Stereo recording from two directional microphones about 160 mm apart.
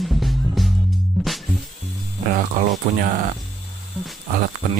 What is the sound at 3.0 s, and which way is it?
Speech, 60° right (ahead or behind).